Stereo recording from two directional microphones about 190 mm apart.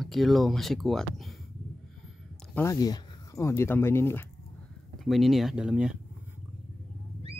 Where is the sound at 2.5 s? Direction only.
15° left (ahead or behind).